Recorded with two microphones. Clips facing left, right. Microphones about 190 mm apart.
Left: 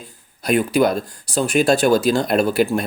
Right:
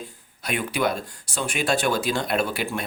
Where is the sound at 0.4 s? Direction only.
40° left (ahead or behind).